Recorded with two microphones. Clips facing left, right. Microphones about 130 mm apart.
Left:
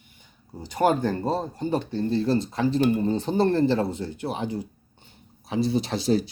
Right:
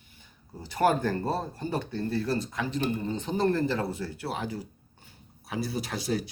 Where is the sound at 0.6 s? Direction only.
20° left (ahead or behind).